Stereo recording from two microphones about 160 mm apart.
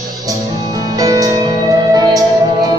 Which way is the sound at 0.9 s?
20° right (ahead or behind).